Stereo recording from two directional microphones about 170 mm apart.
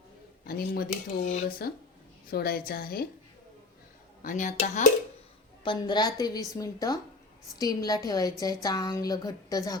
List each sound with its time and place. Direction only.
0.4 s speech: 60° left (ahead or behind); by 1.5 s 45° left (ahead or behind)
1.5 s a woman's voice: 60° left (ahead or behind)
4.2 s speech: 50° left (ahead or behind)
5.6 s a woman's voice: 25° left (ahead or behind)